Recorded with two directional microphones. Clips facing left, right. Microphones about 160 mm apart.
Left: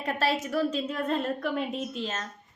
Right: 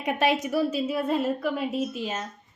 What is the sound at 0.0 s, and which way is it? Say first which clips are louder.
A woman's voice: right 4 dB; 15° right (ahead or behind).